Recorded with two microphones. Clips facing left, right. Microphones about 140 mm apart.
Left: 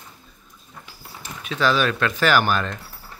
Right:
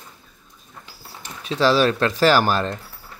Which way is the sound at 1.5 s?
30° right (ahead or behind).